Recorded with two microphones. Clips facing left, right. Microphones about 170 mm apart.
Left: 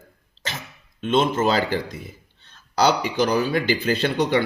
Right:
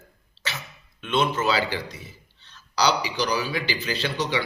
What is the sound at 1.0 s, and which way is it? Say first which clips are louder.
A man's voice: left 4 dB; 45° left (ahead or behind).